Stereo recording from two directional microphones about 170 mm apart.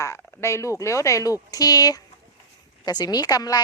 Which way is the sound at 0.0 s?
15° left (ahead or behind).